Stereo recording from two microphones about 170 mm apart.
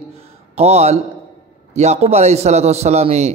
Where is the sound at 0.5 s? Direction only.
40° right (ahead or behind).